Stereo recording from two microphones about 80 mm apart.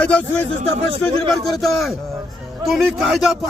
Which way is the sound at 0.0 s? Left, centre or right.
Centre.